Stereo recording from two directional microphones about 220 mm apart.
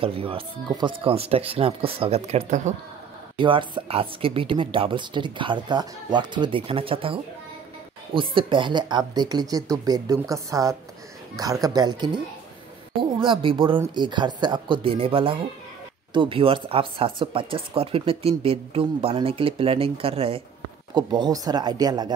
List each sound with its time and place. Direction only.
0.0 s speech: 25° right (ahead or behind)
13.2 s speech: 25° right (ahead or behind)